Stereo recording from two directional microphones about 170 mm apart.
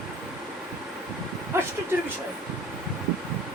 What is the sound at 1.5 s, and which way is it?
Vehicle, 15° right (ahead or behind).